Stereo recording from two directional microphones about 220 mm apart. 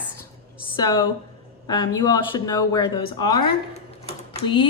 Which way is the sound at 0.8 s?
15° left (ahead or behind).